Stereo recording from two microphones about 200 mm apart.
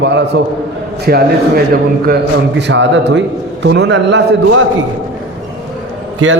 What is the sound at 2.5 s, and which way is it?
A man's voice, 60° right (ahead or behind).